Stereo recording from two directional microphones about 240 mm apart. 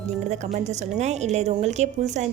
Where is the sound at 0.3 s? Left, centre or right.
Right.